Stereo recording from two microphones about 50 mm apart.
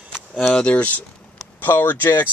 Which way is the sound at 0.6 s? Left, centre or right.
Left.